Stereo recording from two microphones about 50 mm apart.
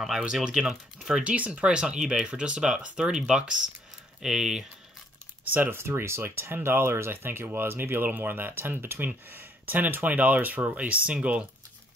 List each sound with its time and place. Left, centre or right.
0.2 s speech: centre
1.2 s speech: right; by 4.6 s centre
5.5 s speech: right
5.8 s speech: right